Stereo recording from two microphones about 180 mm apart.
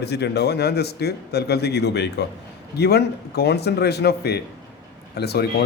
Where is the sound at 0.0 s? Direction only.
65° left (ahead or behind).